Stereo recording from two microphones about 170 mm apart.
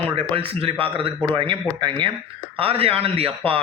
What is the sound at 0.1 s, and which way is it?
A man's voice, 30° right (ahead or behind).